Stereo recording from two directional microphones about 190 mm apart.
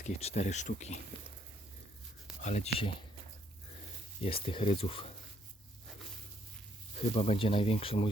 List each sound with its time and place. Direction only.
0.0 s speech: 35° left (ahead or behind)
2.4 s speech: 40° left (ahead or behind)
4.2 s speech: 30° left (ahead or behind)
7.1 s speech: 35° left (ahead or behind)